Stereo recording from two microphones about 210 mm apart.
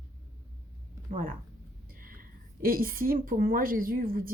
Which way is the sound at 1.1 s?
40° right (ahead or behind).